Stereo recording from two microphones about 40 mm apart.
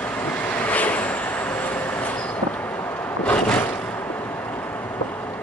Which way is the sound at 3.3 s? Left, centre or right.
Left.